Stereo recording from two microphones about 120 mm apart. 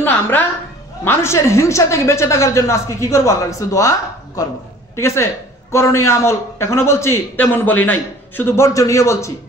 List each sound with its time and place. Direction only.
0.0 s a sound: 15° left (ahead or behind)
1.0 s a man's voice: 20° left (ahead or behind)
4.9 s a man's voice: 25° left (ahead or behind)